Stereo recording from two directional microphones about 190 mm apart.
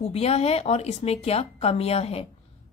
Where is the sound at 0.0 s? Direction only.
30° left (ahead or behind).